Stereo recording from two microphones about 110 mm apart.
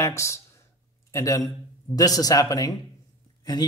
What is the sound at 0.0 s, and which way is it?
A man's voice, 25° left (ahead or behind).